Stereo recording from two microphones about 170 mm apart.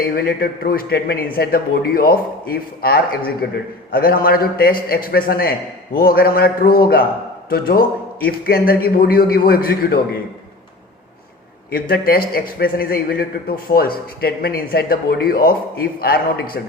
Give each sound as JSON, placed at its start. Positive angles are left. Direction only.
{"t": 0.0, "sound": "a man's voice", "side_deg": 65}
{"t": 11.7, "sound": "a man's voice", "side_deg": 60}